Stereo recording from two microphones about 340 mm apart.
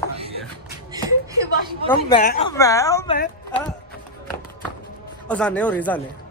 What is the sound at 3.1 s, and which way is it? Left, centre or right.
Speech, left.